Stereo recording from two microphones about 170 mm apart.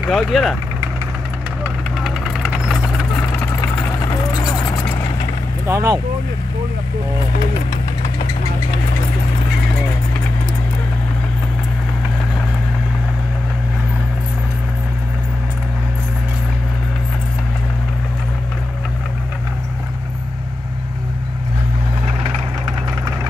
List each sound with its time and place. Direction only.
0.1 s speech: centre (ahead or behind)
1.6 s vehicle: centre (ahead or behind)
5.7 s speech: 15° right (ahead or behind)